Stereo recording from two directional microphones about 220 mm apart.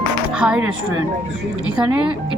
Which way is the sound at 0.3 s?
5° right (ahead or behind).